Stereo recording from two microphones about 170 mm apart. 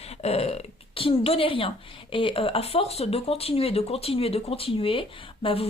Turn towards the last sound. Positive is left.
turn(degrees=30)  # may be behind; listen again after turning